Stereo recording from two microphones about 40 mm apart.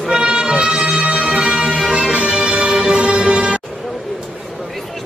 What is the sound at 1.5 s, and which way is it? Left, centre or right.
Music, centre.